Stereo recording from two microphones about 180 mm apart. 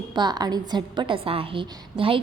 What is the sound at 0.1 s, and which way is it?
A woman's voice, 25° right (ahead or behind).